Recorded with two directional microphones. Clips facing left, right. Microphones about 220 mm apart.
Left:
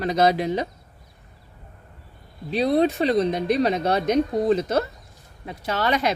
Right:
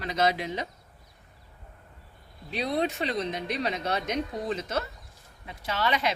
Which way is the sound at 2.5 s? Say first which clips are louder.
Left 9 dB; 35° left (ahead or behind).